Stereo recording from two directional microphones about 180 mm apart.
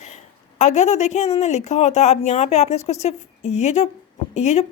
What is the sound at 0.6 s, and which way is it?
A woman's voice, 40° left (ahead or behind).